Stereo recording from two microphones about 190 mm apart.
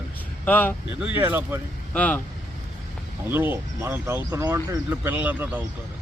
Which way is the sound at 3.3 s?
10° right (ahead or behind).